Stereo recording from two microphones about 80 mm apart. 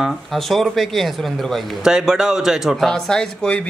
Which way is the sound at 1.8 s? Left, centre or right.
Centre.